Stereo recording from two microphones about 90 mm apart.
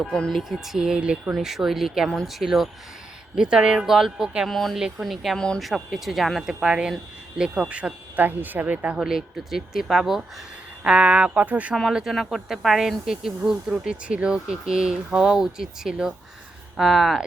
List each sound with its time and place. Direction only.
0.1 s speech: 5° left (ahead or behind); by 9.0 s 15° right (ahead or behind)
9.0 s speech: 5° right (ahead or behind)
11.7 s speech: 5° right (ahead or behind)